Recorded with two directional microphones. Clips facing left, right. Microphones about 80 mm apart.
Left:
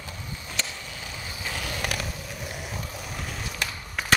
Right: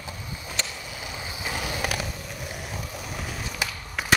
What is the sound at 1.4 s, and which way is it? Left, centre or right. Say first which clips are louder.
Skateboard: right 2 dB; centre.